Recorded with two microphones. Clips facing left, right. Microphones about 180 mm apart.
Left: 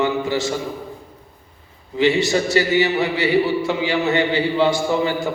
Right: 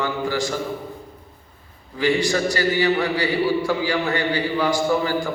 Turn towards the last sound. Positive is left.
turn(degrees=25)  # may be behind; listen again after turning